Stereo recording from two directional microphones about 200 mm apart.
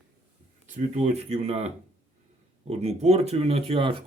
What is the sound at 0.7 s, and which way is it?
Speech, 35° right (ahead or behind).